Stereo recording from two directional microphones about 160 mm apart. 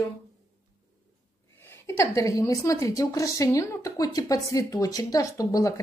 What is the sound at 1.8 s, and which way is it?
A woman's voice, 20° left (ahead or behind).